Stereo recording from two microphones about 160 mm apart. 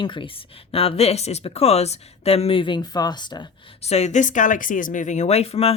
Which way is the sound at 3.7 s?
40° left (ahead or behind).